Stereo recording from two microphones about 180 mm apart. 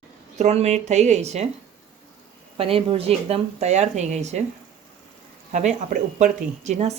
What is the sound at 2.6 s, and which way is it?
Speech, 30° right (ahead or behind).